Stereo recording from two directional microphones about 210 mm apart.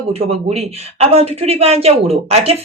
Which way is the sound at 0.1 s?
30° right (ahead or behind).